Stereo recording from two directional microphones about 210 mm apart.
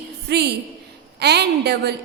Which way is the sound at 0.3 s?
50° right (ahead or behind).